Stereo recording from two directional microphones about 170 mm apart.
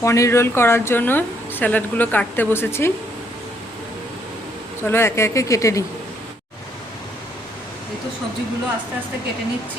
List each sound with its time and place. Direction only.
0.0 s speech: 15° left (ahead or behind)
4.8 s speech: 15° left (ahead or behind)